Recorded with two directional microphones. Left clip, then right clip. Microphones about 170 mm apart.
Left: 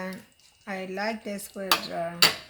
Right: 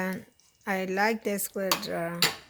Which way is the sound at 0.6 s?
90° right.